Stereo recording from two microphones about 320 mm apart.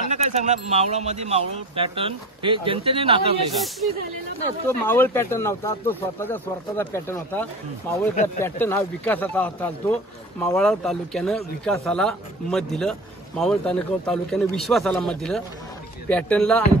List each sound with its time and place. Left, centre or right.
0.1 s speech: right
4.6 s speech: centre